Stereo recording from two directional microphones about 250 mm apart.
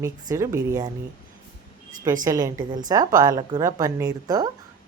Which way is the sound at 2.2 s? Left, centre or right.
Centre.